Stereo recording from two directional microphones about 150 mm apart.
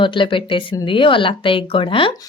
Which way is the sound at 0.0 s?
35° left (ahead or behind).